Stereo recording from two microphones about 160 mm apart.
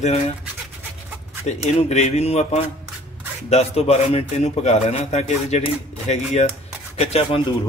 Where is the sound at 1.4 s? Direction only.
45° left (ahead or behind).